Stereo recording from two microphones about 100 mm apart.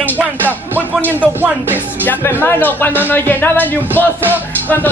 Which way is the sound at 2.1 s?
20° left (ahead or behind).